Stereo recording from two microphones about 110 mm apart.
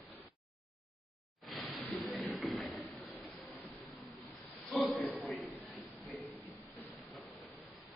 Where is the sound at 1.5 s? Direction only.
Centre (ahead or behind).